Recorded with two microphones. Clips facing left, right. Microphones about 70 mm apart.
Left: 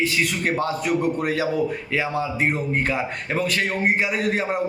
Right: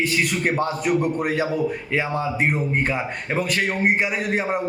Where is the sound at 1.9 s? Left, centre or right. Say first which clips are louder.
Even; right.